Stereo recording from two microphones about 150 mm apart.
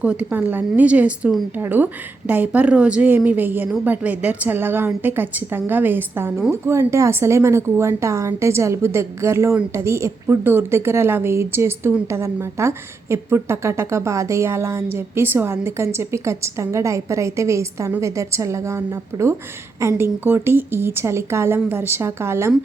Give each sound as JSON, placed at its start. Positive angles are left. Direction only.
{"t": 0.0, "sound": "a woman's voice", "side_deg": -10}